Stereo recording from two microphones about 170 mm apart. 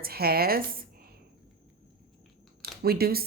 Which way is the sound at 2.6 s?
65° right (ahead or behind).